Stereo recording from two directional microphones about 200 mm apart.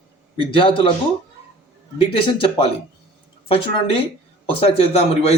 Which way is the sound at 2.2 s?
25° left (ahead or behind).